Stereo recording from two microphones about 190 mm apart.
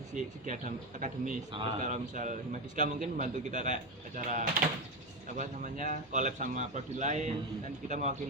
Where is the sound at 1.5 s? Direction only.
25° right (ahead or behind).